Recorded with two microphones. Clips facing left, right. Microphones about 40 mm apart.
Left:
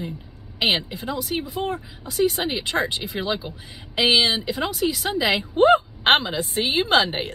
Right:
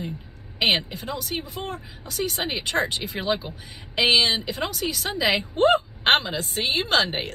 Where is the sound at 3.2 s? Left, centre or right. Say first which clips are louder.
Right 1 dB; right.